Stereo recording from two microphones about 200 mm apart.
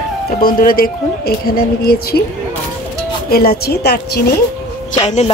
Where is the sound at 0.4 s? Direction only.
45° left (ahead or behind).